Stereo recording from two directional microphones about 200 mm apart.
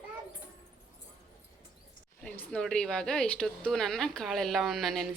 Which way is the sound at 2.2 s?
5° left (ahead or behind).